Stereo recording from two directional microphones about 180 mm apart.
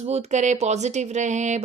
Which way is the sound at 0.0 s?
35° right (ahead or behind).